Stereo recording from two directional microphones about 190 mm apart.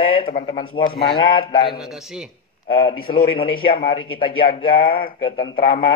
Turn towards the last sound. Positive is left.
turn(degrees=30)  # may be behind; listen again after turning